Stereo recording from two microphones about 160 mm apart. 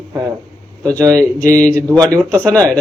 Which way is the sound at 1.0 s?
20° right (ahead or behind).